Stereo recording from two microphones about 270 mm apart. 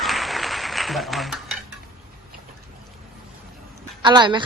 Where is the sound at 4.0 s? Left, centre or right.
Centre.